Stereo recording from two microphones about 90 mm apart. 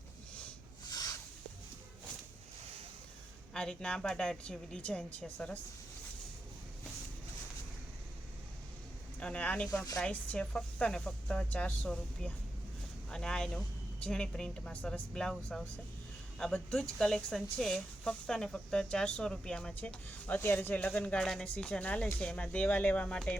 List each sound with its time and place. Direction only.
0.9 s a sound: 45° left (ahead or behind)
3.5 s speech: 10° left (ahead or behind)
9.2 s speech: 15° left (ahead or behind)
9.6 s speech: 40° left (ahead or behind)
10.0 s speech: 10° left (ahead or behind)